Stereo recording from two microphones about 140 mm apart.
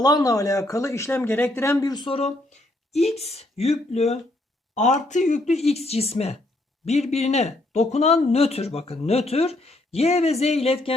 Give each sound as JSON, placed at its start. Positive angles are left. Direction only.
{"t": 0.0, "sound": "speech", "side_deg": 25}